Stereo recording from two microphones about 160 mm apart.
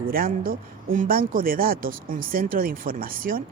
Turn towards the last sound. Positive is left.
turn(degrees=-65)  # may be behind; listen again after turning